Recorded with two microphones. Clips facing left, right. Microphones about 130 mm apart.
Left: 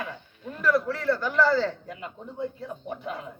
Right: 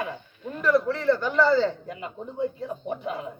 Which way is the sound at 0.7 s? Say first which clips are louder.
Right 5 dB; 25° right (ahead or behind).